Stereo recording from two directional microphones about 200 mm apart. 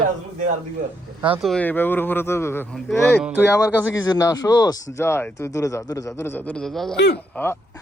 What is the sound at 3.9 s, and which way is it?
A man's voice, 15° left (ahead or behind).